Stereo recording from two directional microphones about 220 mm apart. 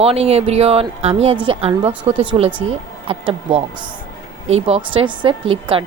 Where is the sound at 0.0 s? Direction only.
25° right (ahead or behind).